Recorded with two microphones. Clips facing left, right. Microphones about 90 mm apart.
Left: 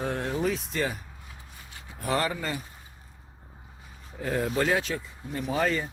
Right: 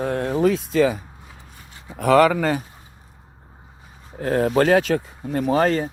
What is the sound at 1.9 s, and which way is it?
Speech, 80° right.